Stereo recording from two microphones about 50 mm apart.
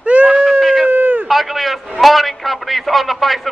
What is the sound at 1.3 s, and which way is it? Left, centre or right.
A man's voice, centre.